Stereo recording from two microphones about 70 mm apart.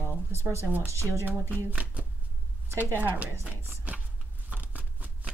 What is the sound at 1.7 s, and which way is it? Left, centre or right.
Speech, right.